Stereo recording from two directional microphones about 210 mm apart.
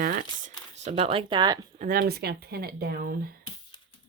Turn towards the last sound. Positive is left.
turn(degrees=-45)  # may be behind; listen again after turning